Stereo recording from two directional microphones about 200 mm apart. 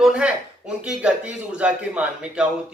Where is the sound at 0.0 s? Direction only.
5° right (ahead or behind).